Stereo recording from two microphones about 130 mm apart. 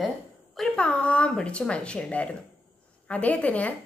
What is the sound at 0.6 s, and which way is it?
A woman's voice, 10° left (ahead or behind).